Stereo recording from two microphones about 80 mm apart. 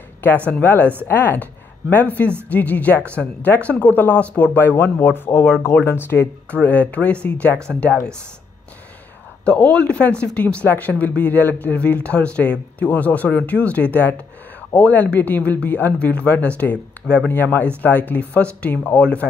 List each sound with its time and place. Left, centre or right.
0.5 s speech: left
6.6 s speech: centre
9.4 s speech: centre